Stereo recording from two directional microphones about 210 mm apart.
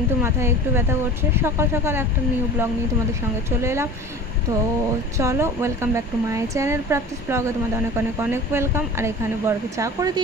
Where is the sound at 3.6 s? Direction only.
10° right (ahead or behind).